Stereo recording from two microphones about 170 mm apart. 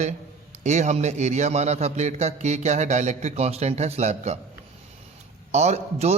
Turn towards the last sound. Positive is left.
turn(degrees=-40)  # may be behind; listen again after turning